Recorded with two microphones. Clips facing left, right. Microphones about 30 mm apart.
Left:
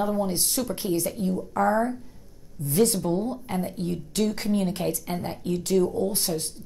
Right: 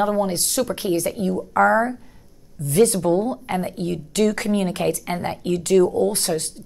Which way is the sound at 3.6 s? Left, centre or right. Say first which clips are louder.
Right 4 dB; right.